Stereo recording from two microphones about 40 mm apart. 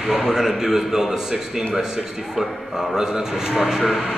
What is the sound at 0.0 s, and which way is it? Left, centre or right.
A man's voice, centre.